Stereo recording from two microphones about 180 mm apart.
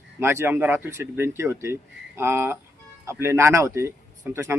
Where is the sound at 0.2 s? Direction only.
15° right (ahead or behind).